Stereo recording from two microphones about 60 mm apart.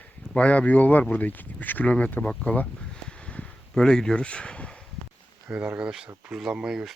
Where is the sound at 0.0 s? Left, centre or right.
Left.